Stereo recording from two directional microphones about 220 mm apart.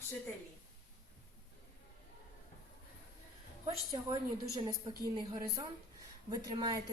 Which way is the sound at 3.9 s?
15° right (ahead or behind).